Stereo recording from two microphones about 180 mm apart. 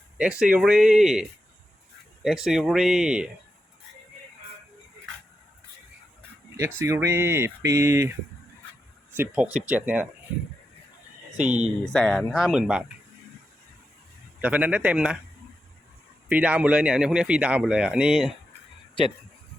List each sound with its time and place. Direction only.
0.2 s speech: 5° right (ahead or behind)
6.6 s speech: 15° right (ahead or behind)
9.1 s speech: 10° right (ahead or behind)
11.3 s speech: 40° right (ahead or behind)
11.9 s speech: 5° left (ahead or behind)
14.4 s speech: 10° right (ahead or behind)
16.3 s speech: 5° right (ahead or behind)